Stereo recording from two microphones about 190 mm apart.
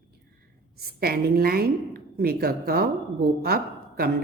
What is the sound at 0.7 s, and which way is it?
A woman's voice, 55° right (ahead or behind).